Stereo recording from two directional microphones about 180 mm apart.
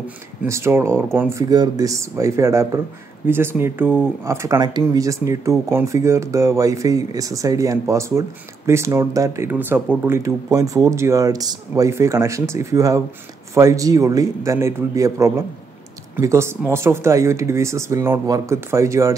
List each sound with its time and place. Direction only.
0.5 s speech: 15° right (ahead or behind)